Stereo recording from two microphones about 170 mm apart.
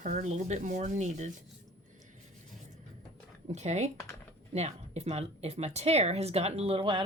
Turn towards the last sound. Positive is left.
turn(degrees=-30)  # may be behind; listen again after turning